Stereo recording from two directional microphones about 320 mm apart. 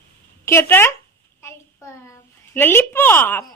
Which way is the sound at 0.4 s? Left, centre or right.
Centre.